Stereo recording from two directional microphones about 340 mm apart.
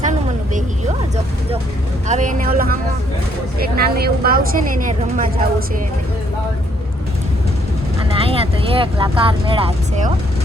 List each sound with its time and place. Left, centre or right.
2.0 s a woman's voice: right
8.2 s speech: centre